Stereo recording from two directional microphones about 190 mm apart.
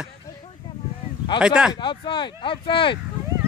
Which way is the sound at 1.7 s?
25° left (ahead or behind).